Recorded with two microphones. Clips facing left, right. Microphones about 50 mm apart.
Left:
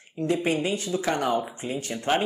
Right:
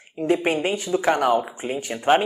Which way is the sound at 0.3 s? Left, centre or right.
Right.